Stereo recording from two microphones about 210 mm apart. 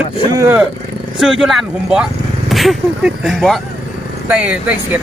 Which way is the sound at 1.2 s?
Centre (ahead or behind).